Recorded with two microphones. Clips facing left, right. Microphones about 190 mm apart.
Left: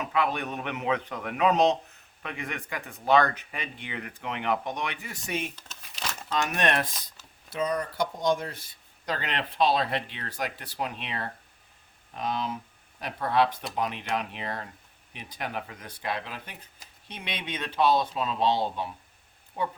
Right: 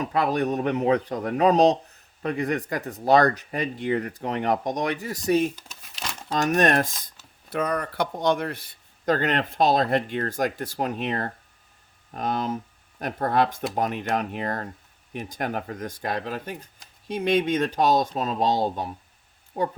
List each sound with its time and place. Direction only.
0.0 s speech: 40° right (ahead or behind)
5.6 s crumpling: centre (ahead or behind)
6.2 s speech: 40° right (ahead or behind)
7.5 s speech: 60° right (ahead or behind); by 19.7 s 40° right (ahead or behind)